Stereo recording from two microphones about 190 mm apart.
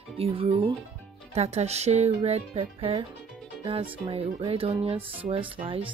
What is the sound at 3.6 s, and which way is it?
Music, 30° right (ahead or behind).